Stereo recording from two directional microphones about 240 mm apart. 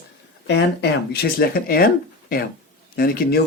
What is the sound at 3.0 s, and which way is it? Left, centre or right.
Speech, left.